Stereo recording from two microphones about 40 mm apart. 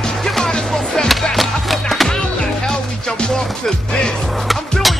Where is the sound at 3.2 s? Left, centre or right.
Centre.